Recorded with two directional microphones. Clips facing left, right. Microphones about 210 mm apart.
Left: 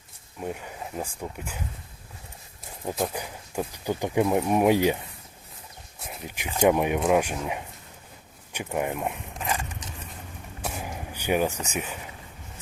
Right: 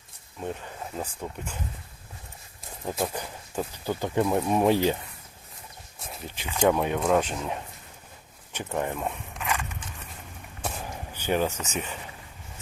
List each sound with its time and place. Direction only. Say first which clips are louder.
0.3 s speech: left 1 dB; 10° left (ahead or behind)
2.9 s speech: left 1 dB; centre (ahead or behind)
3.2 s speech: left 1 dB; 10° left (ahead or behind)
6.2 s speech: left 2 dB; 15° left (ahead or behind)
9.4 s biting: left 1 dB; 30° left (ahead or behind)
10.6 s a sound: left 1 dB; 10° left (ahead or behind)
11.6 s speech: left 1 dB; 10° left (ahead or behind)